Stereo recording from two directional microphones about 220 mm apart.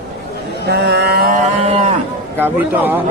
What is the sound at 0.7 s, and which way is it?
Vehicle, 50° right (ahead or behind).